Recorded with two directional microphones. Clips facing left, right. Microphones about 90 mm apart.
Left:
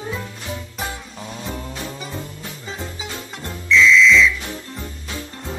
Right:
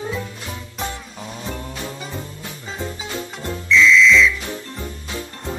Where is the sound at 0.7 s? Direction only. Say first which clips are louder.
Right 1 dB; centre (ahead or behind).